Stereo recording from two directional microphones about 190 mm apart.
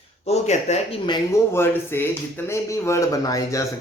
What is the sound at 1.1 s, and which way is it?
A man's voice, 10° left (ahead or behind).